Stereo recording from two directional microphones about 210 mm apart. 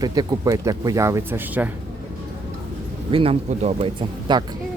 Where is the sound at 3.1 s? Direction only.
25° right (ahead or behind).